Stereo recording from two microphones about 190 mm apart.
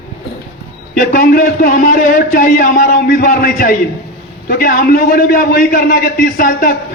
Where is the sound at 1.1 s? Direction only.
50° left (ahead or behind).